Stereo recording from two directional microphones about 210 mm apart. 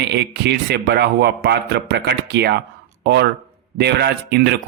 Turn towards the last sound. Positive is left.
turn(degrees=-55)  # may be behind; listen again after turning